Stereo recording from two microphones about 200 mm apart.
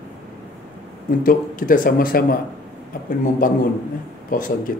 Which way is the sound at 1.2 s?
45° left (ahead or behind).